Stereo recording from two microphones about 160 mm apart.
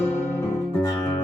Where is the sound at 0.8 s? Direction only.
25° left (ahead or behind).